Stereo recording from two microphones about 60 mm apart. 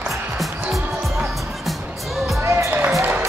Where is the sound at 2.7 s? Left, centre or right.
Right.